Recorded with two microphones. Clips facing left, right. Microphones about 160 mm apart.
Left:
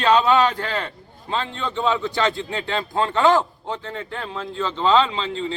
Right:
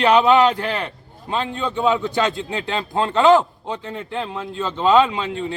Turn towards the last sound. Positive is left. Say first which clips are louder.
# right 3 dB
turn(degrees=-15)  # may be behind; listen again after turning